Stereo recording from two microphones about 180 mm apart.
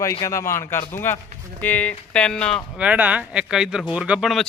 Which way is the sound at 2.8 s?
10° right (ahead or behind).